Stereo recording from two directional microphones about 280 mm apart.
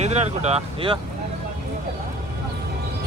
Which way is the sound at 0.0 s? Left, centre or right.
Right.